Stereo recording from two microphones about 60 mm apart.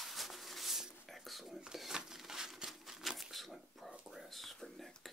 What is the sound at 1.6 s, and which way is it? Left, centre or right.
Crumpling, centre.